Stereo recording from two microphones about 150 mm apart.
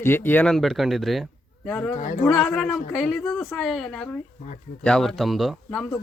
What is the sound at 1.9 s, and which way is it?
Speech, 60° left (ahead or behind).